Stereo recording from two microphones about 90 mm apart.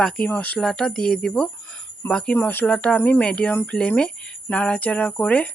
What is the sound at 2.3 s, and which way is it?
Speech, 20° left (ahead or behind).